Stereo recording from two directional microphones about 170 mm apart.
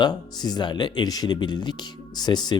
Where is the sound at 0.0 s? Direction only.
25° left (ahead or behind).